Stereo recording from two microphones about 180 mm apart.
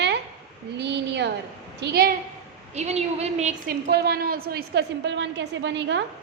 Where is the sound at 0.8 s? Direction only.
70° right (ahead or behind).